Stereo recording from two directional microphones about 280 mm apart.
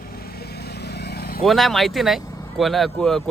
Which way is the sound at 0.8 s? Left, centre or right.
Left.